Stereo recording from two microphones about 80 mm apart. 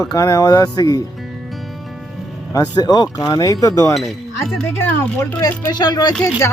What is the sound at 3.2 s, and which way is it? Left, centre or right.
Speech, left.